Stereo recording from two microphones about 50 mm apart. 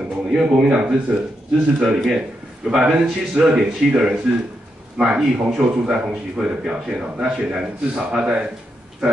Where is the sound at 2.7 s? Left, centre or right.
Centre.